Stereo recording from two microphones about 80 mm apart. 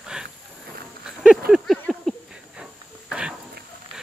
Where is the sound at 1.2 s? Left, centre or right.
Centre.